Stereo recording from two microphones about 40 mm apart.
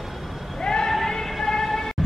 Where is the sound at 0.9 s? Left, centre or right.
Centre.